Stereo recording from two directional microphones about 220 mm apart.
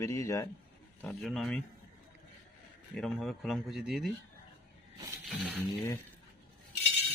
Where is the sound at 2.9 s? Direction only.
Centre (ahead or behind).